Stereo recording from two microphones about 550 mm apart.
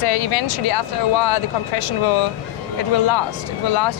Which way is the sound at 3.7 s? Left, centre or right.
Left.